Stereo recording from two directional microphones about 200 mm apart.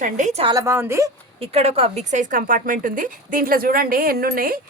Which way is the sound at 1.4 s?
30° right (ahead or behind).